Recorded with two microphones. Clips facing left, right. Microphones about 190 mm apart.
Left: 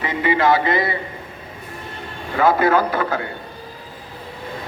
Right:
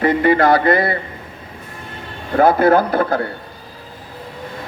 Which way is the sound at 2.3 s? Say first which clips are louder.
Right 4 dB; 45° right (ahead or behind).